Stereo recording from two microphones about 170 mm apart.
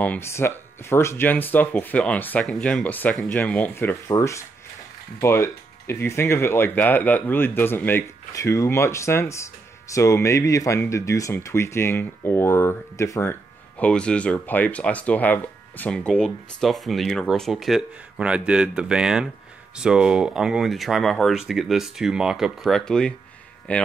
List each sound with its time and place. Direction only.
0.0 s speech: 10° left (ahead or behind)